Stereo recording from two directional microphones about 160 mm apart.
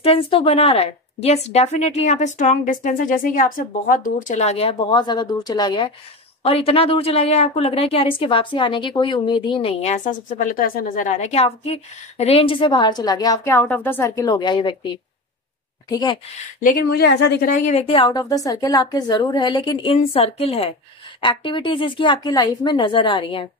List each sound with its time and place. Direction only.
0.0 s a woman's voice: 35° left (ahead or behind)
16.6 s speech: 90° left
17.6 s a woman's voice: 40° left (ahead or behind)